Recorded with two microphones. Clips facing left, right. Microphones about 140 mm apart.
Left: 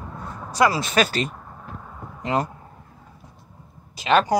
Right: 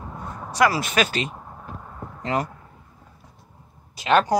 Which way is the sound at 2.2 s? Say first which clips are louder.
Left 2 dB; 25° left (ahead or behind).